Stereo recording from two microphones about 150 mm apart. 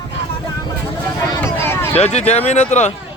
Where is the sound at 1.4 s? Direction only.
15° left (ahead or behind).